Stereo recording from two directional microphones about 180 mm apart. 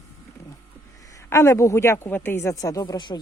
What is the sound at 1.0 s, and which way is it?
Speech, 15° left (ahead or behind).